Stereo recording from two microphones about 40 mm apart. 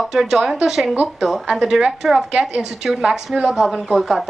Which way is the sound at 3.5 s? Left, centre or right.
Centre.